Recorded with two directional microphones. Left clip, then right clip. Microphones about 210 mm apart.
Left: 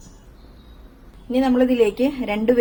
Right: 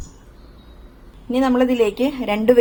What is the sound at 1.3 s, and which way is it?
A woman's voice, 20° right (ahead or behind).